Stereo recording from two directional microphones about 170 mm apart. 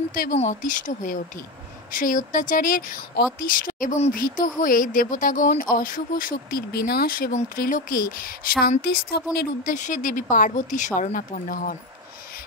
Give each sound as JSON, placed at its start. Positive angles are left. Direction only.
{"t": 0.1, "sound": "speech", "side_deg": 60}
{"t": 0.4, "sound": "speech", "side_deg": 45}
{"t": 9.8, "sound": "speech", "side_deg": 50}